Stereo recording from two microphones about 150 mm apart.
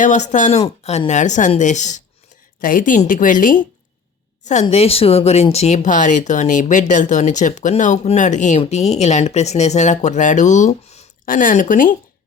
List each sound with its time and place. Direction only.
0.0 s a woman's voice: 55° left (ahead or behind)
2.6 s a woman's voice: 65° left (ahead or behind)
4.7 s speech: 40° left (ahead or behind)
11.3 s a woman's voice: 65° left (ahead or behind)